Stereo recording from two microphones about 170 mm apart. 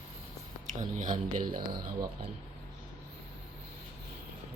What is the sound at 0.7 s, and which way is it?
Speech, 50° right (ahead or behind).